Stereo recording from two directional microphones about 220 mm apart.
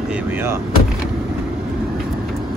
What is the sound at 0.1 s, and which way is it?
Speech, 10° right (ahead or behind).